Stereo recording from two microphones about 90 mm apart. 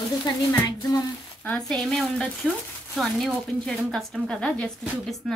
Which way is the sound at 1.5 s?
5° left (ahead or behind).